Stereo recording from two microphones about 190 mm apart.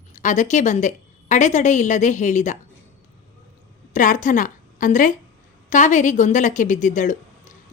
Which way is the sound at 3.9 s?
45° left (ahead or behind).